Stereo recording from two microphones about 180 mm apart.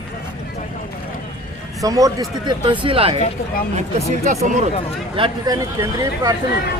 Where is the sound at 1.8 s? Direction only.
20° right (ahead or behind); by 4.6 s 40° right (ahead or behind).